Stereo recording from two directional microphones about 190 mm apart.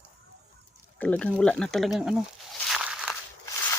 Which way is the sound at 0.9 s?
5° left (ahead or behind).